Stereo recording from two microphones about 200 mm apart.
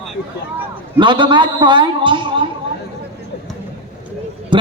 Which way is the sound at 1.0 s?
25° right (ahead or behind).